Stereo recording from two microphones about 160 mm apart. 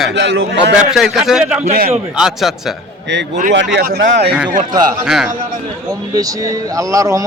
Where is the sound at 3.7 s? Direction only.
80° right.